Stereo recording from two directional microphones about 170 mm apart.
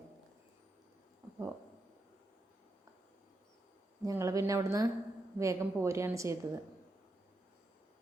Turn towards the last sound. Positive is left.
turn(degrees=-15)  # may be behind; listen again after turning